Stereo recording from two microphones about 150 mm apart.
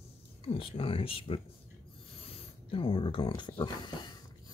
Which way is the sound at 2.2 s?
35° left (ahead or behind).